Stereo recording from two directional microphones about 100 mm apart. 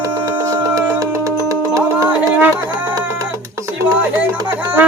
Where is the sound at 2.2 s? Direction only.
15° right (ahead or behind).